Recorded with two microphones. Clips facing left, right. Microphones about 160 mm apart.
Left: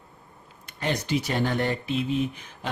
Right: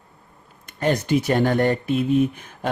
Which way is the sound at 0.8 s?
50° right (ahead or behind).